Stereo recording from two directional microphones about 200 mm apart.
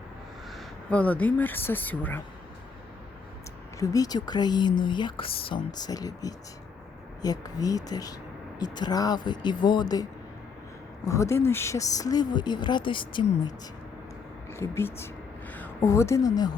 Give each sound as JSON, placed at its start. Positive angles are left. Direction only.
{"t": 0.5, "sound": "speech", "side_deg": 5}
{"t": 3.8, "sound": "speech", "side_deg": 15}
{"t": 14.5, "sound": "a woman's voice", "side_deg": 10}